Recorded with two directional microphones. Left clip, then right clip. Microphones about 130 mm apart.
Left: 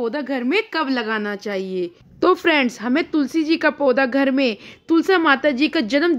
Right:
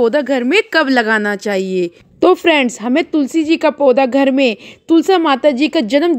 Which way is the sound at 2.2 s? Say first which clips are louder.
Right 5 dB; 35° right (ahead or behind).